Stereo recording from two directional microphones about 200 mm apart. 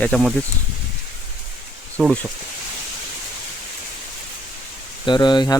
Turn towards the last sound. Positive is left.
turn(degrees=20)  # may be behind; listen again after turning